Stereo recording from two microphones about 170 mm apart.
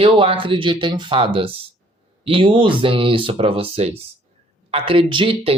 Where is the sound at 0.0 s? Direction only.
30° right (ahead or behind).